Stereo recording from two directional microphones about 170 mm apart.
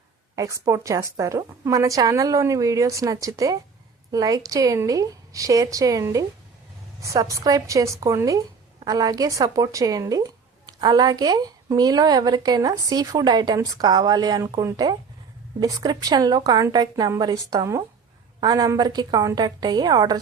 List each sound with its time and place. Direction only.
0.3 s a woman's voice: 20° right (ahead or behind)